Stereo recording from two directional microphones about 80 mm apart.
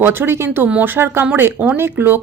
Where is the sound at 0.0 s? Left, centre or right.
Right.